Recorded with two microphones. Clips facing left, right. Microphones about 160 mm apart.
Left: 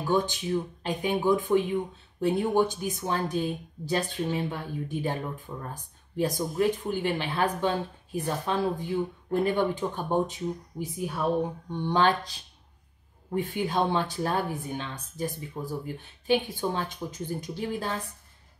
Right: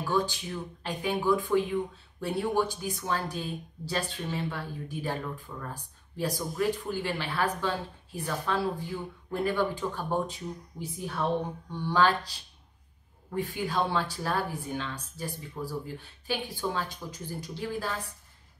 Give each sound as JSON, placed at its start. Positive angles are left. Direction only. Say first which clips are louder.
{"t": 0.0, "sound": "speech", "louder": "left 3 dB", "side_deg": 20}